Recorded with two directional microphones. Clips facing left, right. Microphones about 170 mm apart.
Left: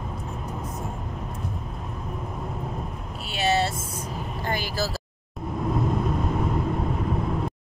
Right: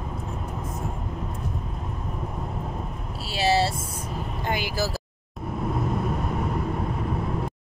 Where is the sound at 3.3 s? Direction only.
30° right (ahead or behind).